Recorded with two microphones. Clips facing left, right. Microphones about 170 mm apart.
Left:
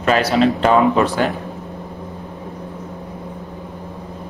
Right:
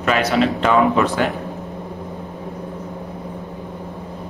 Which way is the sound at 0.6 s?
35° left (ahead or behind).